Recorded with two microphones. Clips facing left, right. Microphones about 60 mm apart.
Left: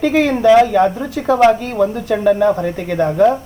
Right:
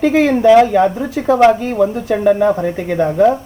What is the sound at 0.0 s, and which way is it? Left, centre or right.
Speech, right.